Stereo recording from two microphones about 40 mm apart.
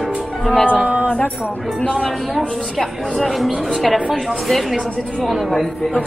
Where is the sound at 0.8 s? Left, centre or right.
Right.